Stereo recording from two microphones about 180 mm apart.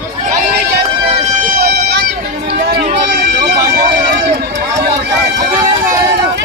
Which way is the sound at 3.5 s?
60° right (ahead or behind).